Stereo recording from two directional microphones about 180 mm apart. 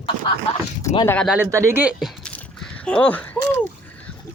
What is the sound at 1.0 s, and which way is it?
Speech, 5° left (ahead or behind).